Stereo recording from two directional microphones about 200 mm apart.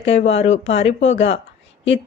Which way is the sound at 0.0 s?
30° left (ahead or behind).